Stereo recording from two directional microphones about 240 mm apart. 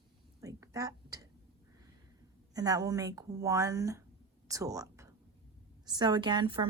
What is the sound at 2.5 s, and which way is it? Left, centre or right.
Speech, centre.